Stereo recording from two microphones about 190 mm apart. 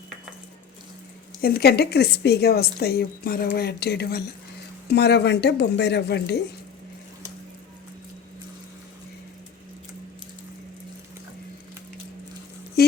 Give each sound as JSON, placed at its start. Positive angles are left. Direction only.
{"t": 1.4, "sound": "a woman's voice", "side_deg": 55}